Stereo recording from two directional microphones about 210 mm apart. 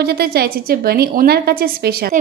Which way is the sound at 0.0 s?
50° right (ahead or behind).